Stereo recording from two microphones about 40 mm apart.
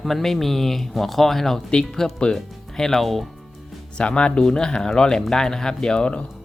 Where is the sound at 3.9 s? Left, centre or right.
Left.